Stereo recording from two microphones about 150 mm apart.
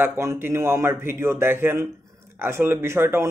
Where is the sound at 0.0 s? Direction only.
15° right (ahead or behind).